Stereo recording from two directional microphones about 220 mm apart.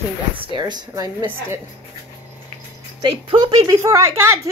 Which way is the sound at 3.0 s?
20° right (ahead or behind).